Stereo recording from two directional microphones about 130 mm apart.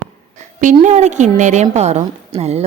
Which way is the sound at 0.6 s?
70° right (ahead or behind).